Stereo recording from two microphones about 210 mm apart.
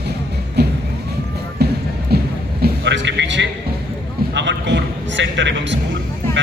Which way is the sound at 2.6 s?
60° right (ahead or behind).